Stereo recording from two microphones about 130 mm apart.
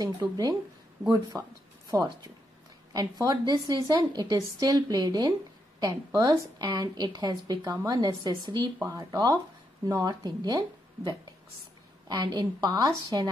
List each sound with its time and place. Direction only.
0.0 s a woman's voice: 30° right (ahead or behind)
12.1 s a woman's voice: 30° right (ahead or behind)